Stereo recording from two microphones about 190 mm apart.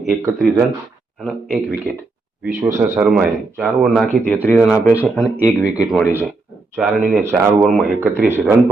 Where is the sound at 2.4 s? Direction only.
10° right (ahead or behind).